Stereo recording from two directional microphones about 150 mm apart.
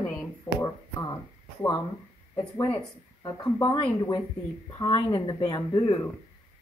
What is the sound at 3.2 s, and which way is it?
Speech, 30° left (ahead or behind).